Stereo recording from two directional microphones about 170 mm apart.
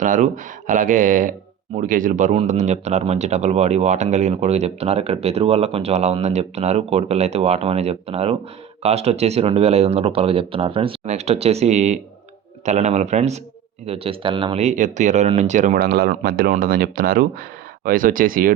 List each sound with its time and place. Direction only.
0.0 s speech: 50° right (ahead or behind)